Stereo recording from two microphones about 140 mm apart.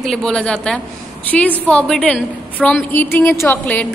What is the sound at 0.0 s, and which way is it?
A woman's voice, centre (ahead or behind).